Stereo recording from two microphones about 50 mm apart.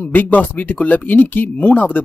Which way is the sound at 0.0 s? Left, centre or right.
Left.